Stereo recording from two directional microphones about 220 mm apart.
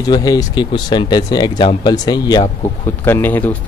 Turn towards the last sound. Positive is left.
turn(degrees=10)  # may be behind; listen again after turning